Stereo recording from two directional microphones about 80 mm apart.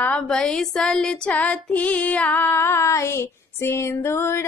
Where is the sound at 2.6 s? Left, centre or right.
Left.